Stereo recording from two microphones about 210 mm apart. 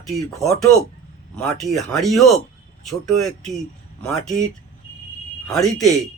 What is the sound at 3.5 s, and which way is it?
Speech, centre (ahead or behind).